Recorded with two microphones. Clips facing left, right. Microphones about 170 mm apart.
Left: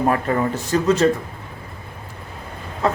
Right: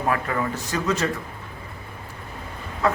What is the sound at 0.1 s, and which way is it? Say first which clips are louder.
Speech: left 5 dB; 30° left (ahead or behind).